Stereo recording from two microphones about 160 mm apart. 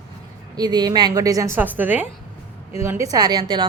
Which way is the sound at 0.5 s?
25° right (ahead or behind).